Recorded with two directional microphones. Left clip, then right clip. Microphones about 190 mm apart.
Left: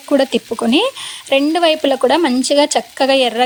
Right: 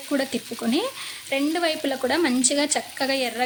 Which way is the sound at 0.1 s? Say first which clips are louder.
Left 12 dB; 40° left (ahead or behind).